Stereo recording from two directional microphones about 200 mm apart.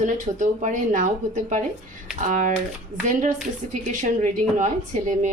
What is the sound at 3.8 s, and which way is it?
Speech, 35° right (ahead or behind).